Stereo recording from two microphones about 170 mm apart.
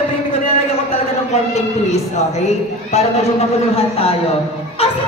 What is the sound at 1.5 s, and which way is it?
A man's voice, 40° left (ahead or behind).